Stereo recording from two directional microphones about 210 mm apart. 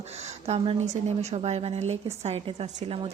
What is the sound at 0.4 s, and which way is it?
A woman's voice, 30° right (ahead or behind).